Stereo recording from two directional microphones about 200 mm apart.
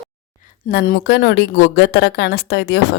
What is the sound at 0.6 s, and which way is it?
A woman's voice, 45° left (ahead or behind).